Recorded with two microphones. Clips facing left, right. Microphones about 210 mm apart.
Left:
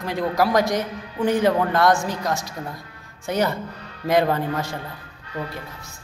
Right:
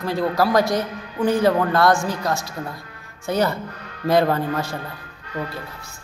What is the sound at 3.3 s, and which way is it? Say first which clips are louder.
A man's voice: right 1 dB; 15° left (ahead or behind).